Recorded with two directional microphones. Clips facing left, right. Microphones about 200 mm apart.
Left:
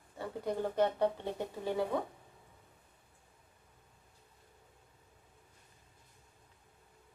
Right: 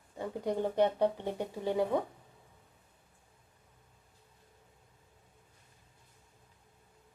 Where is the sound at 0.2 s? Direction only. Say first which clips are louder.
Right 3 dB; 15° right (ahead or behind).